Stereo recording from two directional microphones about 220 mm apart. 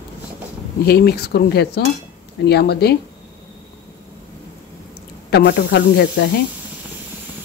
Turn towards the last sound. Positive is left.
turn(degrees=50)  # may be behind; listen again after turning